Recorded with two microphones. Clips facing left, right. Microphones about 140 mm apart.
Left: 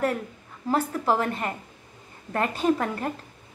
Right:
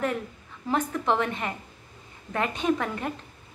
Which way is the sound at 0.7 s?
35° left (ahead or behind).